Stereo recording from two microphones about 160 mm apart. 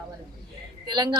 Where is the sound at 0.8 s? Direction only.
30° right (ahead or behind).